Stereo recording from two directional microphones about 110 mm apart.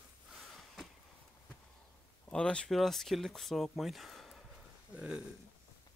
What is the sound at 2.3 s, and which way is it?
Speech, 10° left (ahead or behind).